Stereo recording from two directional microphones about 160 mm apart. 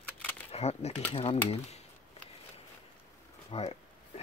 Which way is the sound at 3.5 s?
40° left (ahead or behind).